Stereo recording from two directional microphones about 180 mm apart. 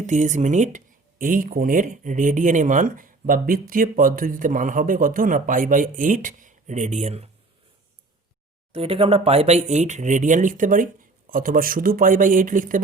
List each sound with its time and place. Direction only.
0.0 s speech: 40° right (ahead or behind)
8.7 s speech: 30° right (ahead or behind); by 12.8 s 50° right (ahead or behind)